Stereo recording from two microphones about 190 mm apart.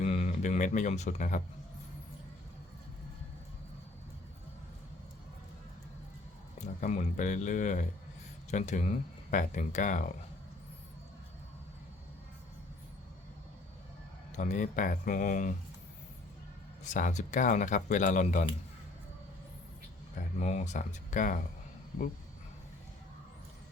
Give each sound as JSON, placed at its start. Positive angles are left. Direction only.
{"t": 0.0, "sound": "speech", "side_deg": 35}
{"t": 6.6, "sound": "speech", "side_deg": 35}
{"t": 14.3, "sound": "speech", "side_deg": 40}
{"t": 16.8, "sound": "speech", "side_deg": 40}
{"t": 20.4, "sound": "speech", "side_deg": 35}